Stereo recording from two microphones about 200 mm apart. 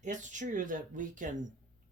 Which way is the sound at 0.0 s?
40° right (ahead or behind).